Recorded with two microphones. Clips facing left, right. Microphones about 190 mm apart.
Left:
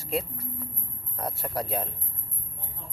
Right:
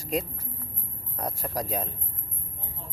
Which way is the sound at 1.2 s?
15° right (ahead or behind).